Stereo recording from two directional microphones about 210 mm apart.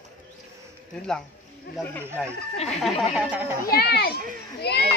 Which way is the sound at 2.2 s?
Centre (ahead or behind).